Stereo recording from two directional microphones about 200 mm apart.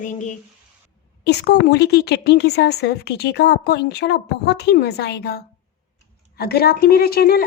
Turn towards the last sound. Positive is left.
turn(degrees=50)  # may be behind; listen again after turning